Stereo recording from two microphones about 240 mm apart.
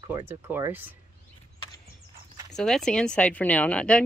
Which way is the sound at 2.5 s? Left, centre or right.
Centre.